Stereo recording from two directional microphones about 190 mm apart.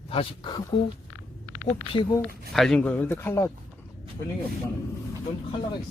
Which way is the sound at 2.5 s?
Centre (ahead or behind).